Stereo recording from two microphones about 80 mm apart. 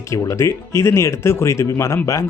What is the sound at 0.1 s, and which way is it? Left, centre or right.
Speech, left.